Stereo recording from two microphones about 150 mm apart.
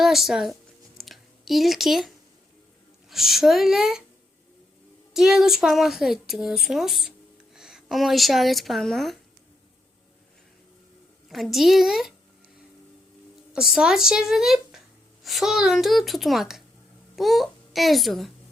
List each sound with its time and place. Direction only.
0.0 s speech: centre (ahead or behind)
0.9 s a sound: centre (ahead or behind)
3.1 s speech: centre (ahead or behind)
5.1 s speech: 5° right (ahead or behind)
11.3 s speech: centre (ahead or behind)
13.5 s a child's voice: 5° right (ahead or behind)